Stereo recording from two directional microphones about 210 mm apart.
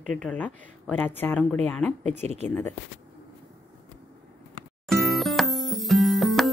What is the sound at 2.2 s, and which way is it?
Speech, 30° right (ahead or behind).